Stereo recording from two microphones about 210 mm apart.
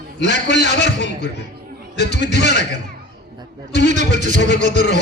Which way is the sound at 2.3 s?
55° left (ahead or behind).